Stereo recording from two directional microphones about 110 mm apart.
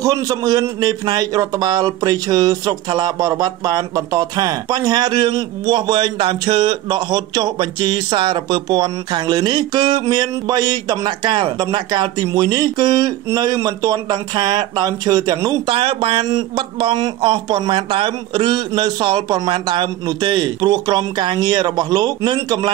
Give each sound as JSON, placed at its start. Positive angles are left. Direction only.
{"t": 0.0, "sound": "a man's voice", "side_deg": -30}
{"t": 15.6, "sound": "speech", "side_deg": -55}